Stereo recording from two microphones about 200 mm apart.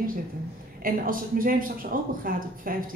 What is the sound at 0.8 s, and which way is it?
A man's voice, 45° right (ahead or behind).